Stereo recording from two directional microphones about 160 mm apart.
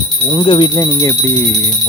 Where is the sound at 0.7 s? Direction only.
20° left (ahead or behind).